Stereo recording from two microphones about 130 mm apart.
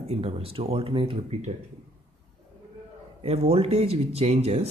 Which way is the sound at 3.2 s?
50° right (ahead or behind).